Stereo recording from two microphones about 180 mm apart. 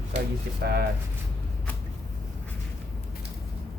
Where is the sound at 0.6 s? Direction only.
60° right (ahead or behind).